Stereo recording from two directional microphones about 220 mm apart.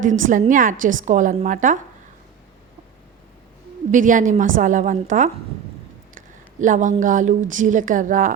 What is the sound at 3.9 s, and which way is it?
A woman's voice, 35° right (ahead or behind).